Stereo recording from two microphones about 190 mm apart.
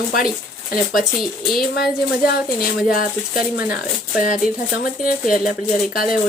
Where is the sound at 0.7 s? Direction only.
50° left (ahead or behind).